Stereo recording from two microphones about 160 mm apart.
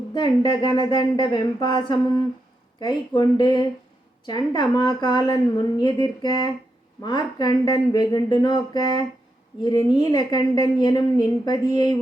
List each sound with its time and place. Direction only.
0.1 s speech: 30° left (ahead or behind)